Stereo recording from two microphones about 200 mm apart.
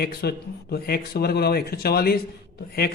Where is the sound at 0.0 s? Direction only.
50° left (ahead or behind).